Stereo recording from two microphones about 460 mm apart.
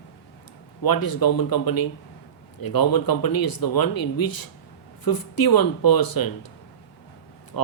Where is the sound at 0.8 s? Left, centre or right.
Left.